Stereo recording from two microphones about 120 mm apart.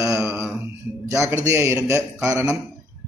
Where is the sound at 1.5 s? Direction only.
25° right (ahead or behind).